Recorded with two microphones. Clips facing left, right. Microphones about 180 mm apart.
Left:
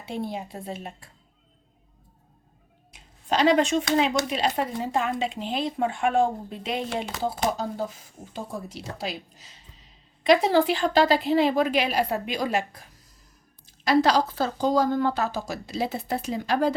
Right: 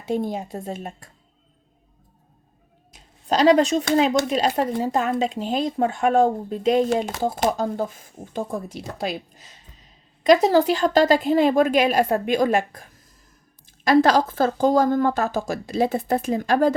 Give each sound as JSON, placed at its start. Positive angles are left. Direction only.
{"t": 0.0, "sound": "a woman's voice", "side_deg": -45}
{"t": 2.9, "sound": "a sound", "side_deg": -40}
{"t": 3.9, "sound": "speech", "side_deg": -40}
{"t": 10.2, "sound": "a woman's voice", "side_deg": -40}